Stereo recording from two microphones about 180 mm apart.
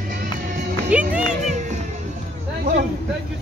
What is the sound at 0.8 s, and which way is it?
Music, 5° right (ahead or behind).